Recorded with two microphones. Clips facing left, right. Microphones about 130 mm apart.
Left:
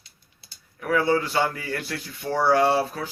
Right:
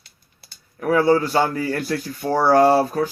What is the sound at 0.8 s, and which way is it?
Speech, 40° right (ahead or behind).